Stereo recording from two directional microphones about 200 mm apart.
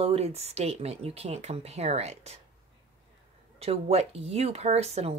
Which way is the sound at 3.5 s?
30° right (ahead or behind).